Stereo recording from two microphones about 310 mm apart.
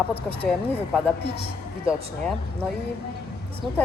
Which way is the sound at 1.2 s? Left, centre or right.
Left.